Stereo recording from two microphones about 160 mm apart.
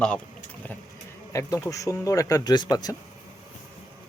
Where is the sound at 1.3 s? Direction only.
20° left (ahead or behind).